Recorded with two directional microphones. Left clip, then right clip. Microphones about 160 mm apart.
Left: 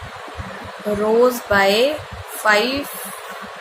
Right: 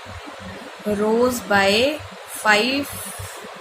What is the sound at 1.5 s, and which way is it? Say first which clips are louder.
Speech: left 2 dB; 20° right (ahead or behind).